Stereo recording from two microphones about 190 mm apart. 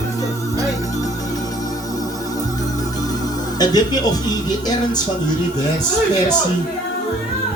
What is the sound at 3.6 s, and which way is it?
Speech, 20° left (ahead or behind).